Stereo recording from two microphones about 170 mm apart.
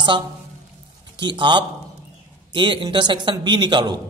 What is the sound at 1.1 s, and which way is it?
A man's voice, 25° right (ahead or behind).